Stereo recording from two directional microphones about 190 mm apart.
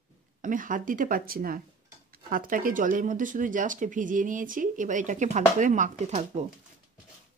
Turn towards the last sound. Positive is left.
turn(degrees=-35)  # may be behind; listen again after turning